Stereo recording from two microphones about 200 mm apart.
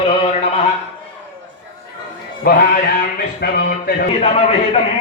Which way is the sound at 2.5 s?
50° left (ahead or behind).